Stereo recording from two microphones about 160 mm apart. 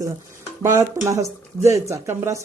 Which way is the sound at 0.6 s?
15° right (ahead or behind).